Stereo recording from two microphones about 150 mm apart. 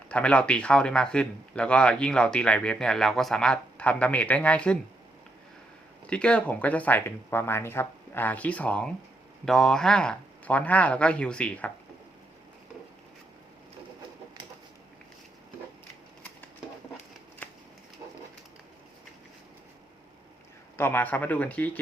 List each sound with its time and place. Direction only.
0.1 s speech: 10° left (ahead or behind)
6.1 s speech: 5° left (ahead or behind)
18.0 s a sound: 35° right (ahead or behind)
20.7 s speech: 15° left (ahead or behind)